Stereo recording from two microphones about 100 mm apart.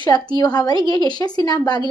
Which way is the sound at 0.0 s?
45° left (ahead or behind).